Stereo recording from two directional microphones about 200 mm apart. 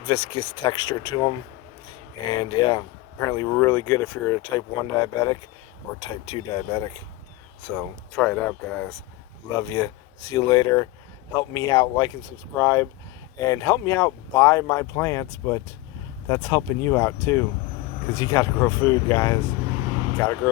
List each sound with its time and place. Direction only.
0.0 s speech: 25° left (ahead or behind)
7.8 s speech: 5° left (ahead or behind)
9.5 s speech: 20° left (ahead or behind)